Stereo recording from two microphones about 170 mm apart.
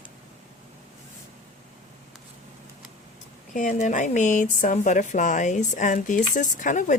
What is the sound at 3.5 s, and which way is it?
Speech, 50° left (ahead or behind).